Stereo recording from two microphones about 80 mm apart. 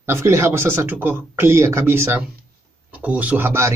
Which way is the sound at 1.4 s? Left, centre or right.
Right.